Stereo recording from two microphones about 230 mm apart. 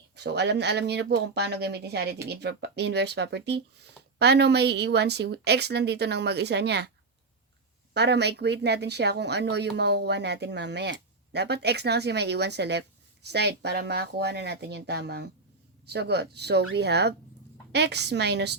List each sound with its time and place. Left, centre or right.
0.2 s speech: right
7.9 s speech: right